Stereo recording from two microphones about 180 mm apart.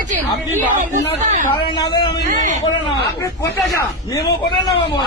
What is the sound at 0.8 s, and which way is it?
Speech, 45° right (ahead or behind).